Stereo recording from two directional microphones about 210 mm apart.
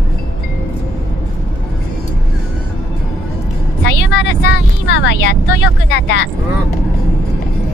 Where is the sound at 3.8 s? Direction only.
55° left (ahead or behind).